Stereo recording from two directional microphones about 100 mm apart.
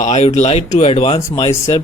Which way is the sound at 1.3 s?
65° left (ahead or behind).